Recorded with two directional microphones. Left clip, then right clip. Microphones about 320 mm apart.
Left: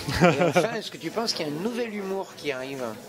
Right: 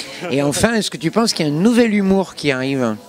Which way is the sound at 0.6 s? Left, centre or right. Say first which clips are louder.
Right 11 dB; right.